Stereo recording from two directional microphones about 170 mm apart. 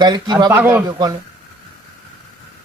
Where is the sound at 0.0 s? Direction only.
25° right (ahead or behind).